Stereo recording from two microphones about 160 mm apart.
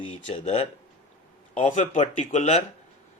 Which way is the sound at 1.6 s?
50° left (ahead or behind).